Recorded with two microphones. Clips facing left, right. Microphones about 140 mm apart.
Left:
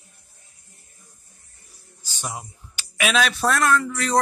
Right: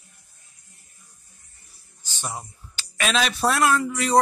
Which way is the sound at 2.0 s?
10° left (ahead or behind).